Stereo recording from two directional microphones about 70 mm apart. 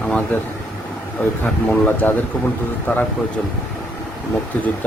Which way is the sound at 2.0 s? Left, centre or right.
Left.